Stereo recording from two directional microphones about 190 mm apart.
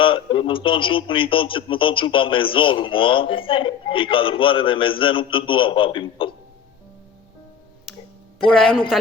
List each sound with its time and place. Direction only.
0.0 s speech: 25° left (ahead or behind)
7.9 s music: centre (ahead or behind)